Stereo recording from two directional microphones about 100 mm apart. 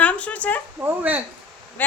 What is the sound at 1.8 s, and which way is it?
Speech, 15° left (ahead or behind).